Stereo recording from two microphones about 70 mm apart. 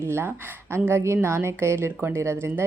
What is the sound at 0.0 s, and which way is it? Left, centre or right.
A woman's voice, right.